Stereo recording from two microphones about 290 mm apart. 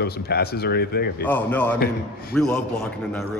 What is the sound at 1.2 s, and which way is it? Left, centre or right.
A man's voice, centre.